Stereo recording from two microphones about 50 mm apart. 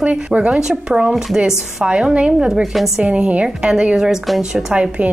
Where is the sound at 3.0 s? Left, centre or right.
Right.